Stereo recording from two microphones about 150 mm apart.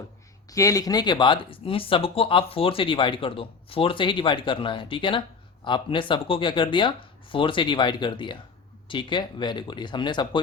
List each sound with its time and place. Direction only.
0.5 s speech: 20° left (ahead or behind)